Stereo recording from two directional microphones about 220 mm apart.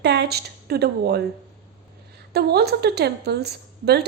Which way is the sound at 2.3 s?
45° right (ahead or behind).